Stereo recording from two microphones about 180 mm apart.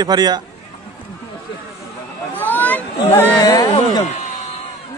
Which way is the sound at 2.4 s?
10° left (ahead or behind).